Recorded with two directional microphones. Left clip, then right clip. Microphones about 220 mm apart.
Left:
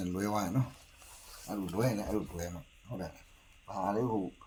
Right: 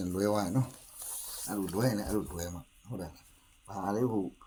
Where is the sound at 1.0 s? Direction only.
50° right (ahead or behind).